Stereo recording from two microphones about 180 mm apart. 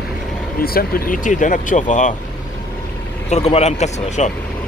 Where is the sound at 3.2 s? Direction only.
35° left (ahead or behind).